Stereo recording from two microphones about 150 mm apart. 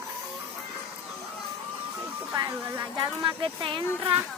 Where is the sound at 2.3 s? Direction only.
20° right (ahead or behind).